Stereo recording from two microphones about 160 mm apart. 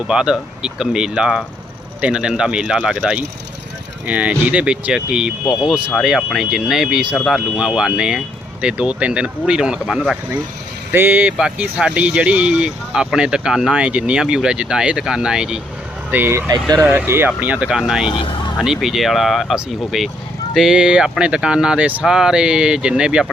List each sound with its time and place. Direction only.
0.1 s speech: 5° right (ahead or behind)
10.9 s speech: 10° right (ahead or behind)
16.5 s speech: 25° right (ahead or behind)
16.8 s speech: 15° right (ahead or behind)
18.1 s speech: 30° left (ahead or behind)
18.5 s speech: 5° right (ahead or behind)